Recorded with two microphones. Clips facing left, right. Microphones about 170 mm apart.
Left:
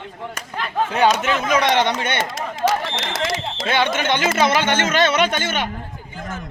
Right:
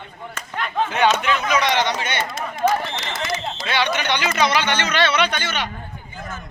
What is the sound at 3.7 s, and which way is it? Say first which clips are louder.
Speech: left 3 dB; 50° left (ahead or behind).